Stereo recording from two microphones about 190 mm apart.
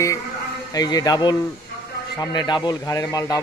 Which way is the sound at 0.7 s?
20° left (ahead or behind).